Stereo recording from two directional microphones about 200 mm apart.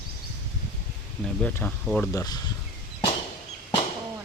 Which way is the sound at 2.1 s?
20° left (ahead or behind).